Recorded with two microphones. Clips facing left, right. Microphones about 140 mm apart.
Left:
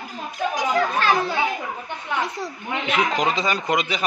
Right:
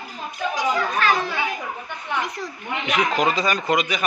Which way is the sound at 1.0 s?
30° left (ahead or behind).